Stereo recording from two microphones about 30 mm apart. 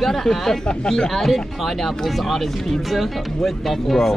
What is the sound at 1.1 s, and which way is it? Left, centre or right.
Speech, centre.